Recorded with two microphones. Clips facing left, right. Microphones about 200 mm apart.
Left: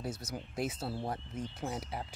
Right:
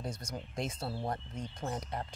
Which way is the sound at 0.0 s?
5° left (ahead or behind).